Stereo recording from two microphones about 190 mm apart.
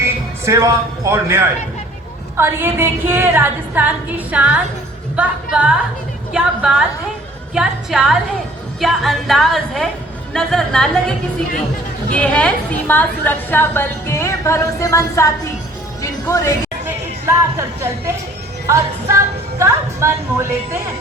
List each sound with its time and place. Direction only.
0.0 s a man's voice: 15° right (ahead or behind)
2.4 s a woman's voice: 10° right (ahead or behind)
6.3 s music: 5° right (ahead or behind)
12.1 s a woman's voice: 5° left (ahead or behind)
16.0 s music: 15° left (ahead or behind)
17.2 s a woman's voice: 15° right (ahead or behind)
19.5 s a woman's voice: 15° right (ahead or behind)